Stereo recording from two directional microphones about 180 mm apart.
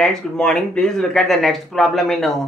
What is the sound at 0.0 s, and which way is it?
Speech, 5° left (ahead or behind).